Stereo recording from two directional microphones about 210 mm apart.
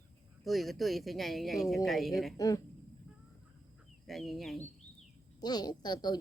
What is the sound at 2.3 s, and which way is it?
Speech, 15° left (ahead or behind).